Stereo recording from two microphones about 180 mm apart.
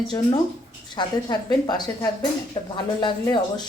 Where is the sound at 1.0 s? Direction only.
20° left (ahead or behind).